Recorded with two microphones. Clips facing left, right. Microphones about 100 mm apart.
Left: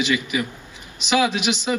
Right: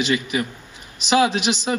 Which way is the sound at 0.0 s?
35° right (ahead or behind).